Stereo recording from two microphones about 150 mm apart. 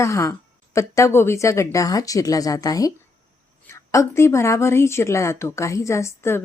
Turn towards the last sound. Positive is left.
turn(degrees=15)  # may be behind; listen again after turning